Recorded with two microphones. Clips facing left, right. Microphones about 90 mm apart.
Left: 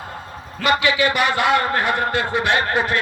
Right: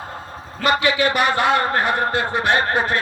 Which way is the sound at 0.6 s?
35° right (ahead or behind).